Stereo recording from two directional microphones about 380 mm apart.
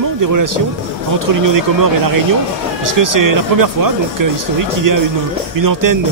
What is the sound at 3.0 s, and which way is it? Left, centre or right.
A man's voice, right.